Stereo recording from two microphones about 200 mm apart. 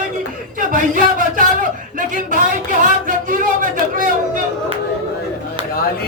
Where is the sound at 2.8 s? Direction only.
40° right (ahead or behind).